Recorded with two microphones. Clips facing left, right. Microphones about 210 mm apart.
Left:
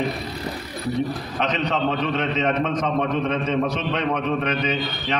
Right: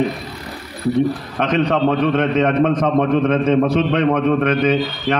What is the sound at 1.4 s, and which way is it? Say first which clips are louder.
A man's voice: right 7 dB; 50° right (ahead or behind).